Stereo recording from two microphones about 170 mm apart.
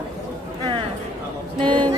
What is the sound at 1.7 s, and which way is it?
Music, 30° right (ahead or behind).